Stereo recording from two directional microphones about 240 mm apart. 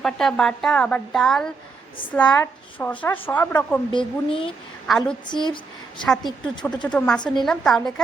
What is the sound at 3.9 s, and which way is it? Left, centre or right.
Speech, left.